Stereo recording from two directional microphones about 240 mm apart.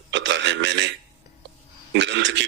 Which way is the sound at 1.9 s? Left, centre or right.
Right.